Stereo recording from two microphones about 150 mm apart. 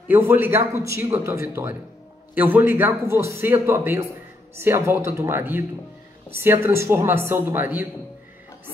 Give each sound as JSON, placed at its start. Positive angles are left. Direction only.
{"t": 0.1, "sound": "a man's voice", "side_deg": -15}